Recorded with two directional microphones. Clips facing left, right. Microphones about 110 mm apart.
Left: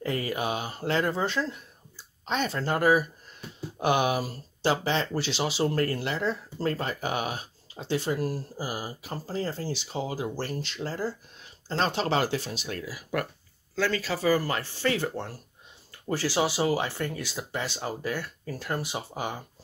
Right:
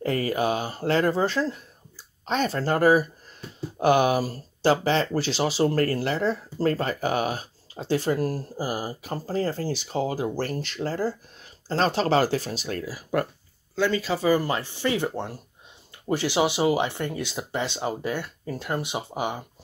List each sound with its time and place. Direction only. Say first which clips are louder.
0.0 s speech: right 5 dB; 45° right (ahead or behind)
13.7 s speech: right 4 dB; 20° right (ahead or behind)